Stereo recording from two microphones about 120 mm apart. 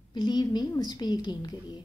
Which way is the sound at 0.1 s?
35° left (ahead or behind).